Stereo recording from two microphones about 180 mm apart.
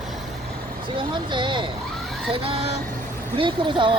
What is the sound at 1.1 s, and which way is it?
Vehicle, 25° right (ahead or behind).